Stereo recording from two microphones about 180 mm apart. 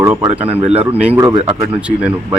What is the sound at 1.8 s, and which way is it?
Speech, 5° right (ahead or behind).